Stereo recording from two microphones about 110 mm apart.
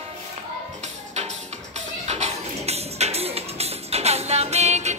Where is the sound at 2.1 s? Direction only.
80° right.